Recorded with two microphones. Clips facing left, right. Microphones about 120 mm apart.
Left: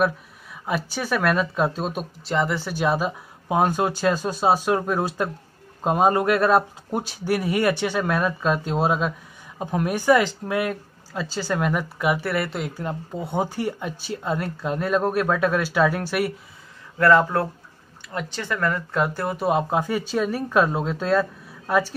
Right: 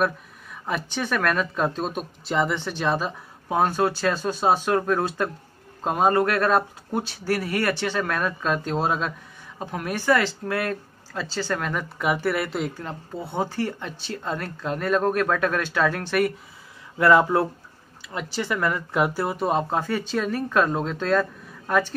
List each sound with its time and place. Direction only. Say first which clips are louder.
0.0 s speech: left 2 dB; 5° left (ahead or behind)
17.0 s speech: even; 15° right (ahead or behind)
19.3 s speech: left 2 dB; 5° left (ahead or behind)